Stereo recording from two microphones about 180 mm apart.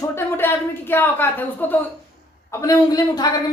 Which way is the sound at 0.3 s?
10° left (ahead or behind).